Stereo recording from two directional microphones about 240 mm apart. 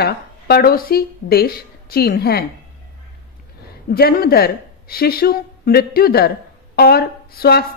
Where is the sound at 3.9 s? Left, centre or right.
Left.